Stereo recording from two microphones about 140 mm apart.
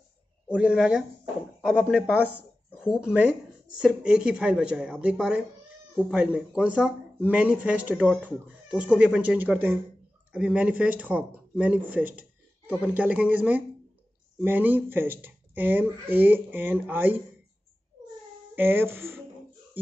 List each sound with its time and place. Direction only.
0.5 s speech: 5° right (ahead or behind)
18.5 s speech: 15° right (ahead or behind)